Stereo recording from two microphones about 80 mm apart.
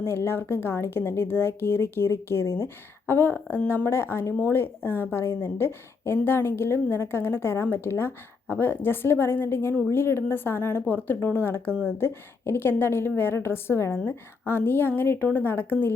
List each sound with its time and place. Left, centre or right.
0.0 s speech: left
3.1 s a woman's voice: left